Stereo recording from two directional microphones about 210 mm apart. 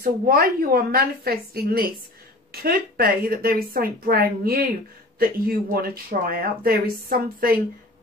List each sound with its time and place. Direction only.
0.0 s speech: 45° right (ahead or behind)